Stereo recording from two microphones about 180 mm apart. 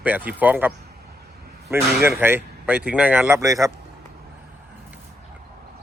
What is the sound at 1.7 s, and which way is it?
Speech, 10° right (ahead or behind).